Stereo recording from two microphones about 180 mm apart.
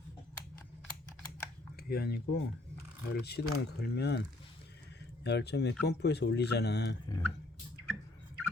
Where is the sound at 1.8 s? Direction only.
60° left (ahead or behind).